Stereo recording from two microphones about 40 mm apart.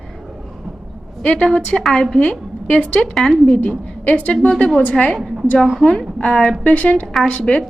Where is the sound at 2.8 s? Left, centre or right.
Left.